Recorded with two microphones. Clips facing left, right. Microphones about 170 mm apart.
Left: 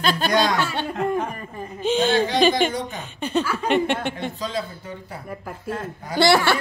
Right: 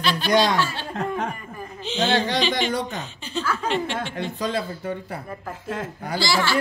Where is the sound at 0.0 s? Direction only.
45° left (ahead or behind).